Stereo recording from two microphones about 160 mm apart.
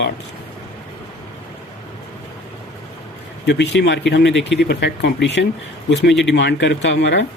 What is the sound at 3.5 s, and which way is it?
Speech, 90° left.